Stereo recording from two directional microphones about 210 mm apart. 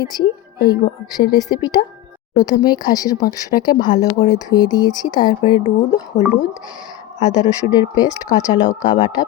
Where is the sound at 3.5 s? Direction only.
40° left (ahead or behind).